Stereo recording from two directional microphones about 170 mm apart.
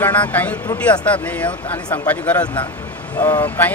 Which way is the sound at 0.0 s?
10° left (ahead or behind).